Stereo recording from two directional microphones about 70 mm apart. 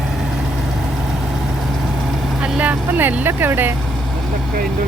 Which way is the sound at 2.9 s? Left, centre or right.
Right.